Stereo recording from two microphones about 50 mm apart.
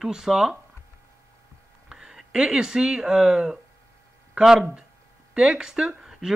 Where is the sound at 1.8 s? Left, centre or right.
Centre.